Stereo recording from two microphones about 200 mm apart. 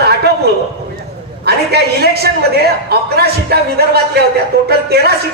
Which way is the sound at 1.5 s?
50° right (ahead or behind).